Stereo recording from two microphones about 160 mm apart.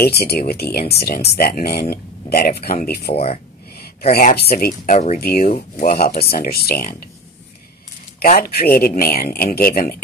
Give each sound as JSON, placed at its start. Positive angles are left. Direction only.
{"t": 0.0, "sound": "speech", "side_deg": 80}
{"t": 4.9, "sound": "speech", "side_deg": 50}
{"t": 5.2, "sound": "speech", "side_deg": 70}
{"t": 5.5, "sound": "speech", "side_deg": 50}
{"t": 6.2, "sound": "speech", "side_deg": 70}
{"t": 8.2, "sound": "speech", "side_deg": 70}